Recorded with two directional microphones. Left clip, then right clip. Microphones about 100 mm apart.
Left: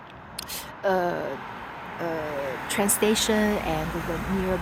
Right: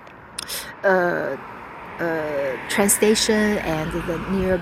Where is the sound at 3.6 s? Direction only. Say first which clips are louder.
Right 3 dB; 50° right (ahead or behind).